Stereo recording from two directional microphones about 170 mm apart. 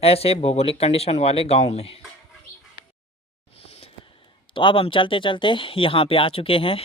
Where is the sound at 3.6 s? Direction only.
35° left (ahead or behind).